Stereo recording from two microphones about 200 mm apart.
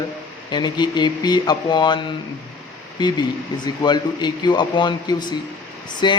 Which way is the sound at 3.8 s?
20° left (ahead or behind).